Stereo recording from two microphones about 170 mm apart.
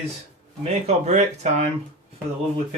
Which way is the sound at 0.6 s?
40° right (ahead or behind).